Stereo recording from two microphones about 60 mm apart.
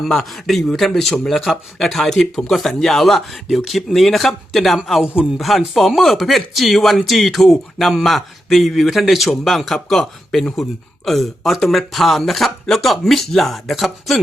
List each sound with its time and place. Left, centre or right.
0.0 s speech: centre